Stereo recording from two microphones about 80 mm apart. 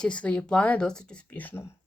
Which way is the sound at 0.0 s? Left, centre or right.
Centre.